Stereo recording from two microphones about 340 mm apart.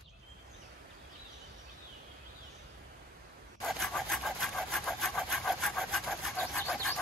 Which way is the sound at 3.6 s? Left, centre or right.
Centre.